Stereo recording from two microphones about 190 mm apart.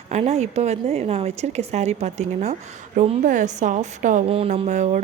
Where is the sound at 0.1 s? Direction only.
35° right (ahead or behind).